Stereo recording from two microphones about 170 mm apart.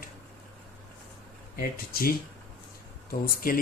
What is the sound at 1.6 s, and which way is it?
Speech, 60° left (ahead or behind).